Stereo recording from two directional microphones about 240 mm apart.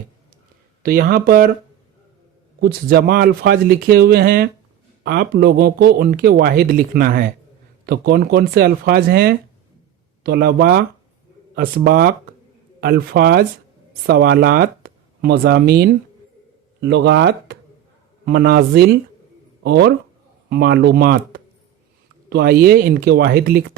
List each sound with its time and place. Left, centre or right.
0.8 s speech: right
2.6 s speech: right